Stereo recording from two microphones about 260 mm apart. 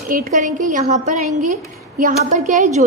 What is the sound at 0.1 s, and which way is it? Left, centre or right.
A woman's voice, right.